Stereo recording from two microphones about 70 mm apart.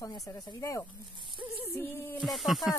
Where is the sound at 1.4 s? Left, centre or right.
Centre.